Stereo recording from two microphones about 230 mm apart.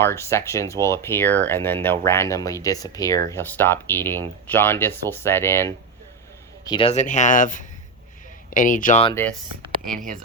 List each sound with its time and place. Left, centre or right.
0.0 s speech: centre
6.7 s speech: left